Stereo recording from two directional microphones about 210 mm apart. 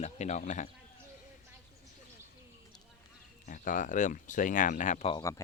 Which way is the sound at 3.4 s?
40° left (ahead or behind).